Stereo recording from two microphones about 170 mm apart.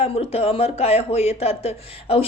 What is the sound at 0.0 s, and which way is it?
Speech, 35° left (ahead or behind).